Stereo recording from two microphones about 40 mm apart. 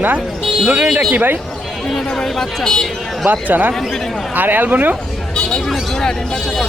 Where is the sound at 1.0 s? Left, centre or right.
Right.